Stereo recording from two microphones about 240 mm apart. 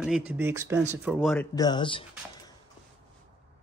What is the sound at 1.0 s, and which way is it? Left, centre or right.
Speech, centre.